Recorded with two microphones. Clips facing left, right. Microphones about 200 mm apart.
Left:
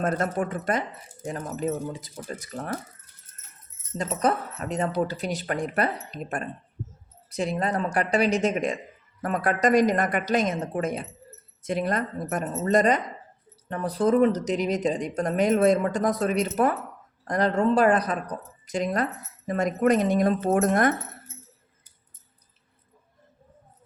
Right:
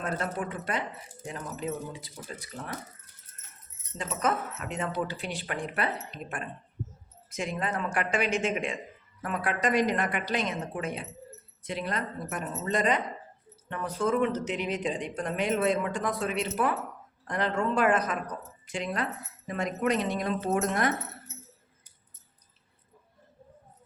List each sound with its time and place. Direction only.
0.0 s speech: 45° left (ahead or behind)
3.9 s speech: 40° left (ahead or behind)